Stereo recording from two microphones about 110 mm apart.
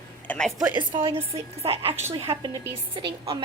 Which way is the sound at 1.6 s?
65° right (ahead or behind).